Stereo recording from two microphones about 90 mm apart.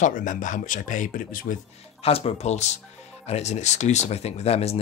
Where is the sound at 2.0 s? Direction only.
90° left.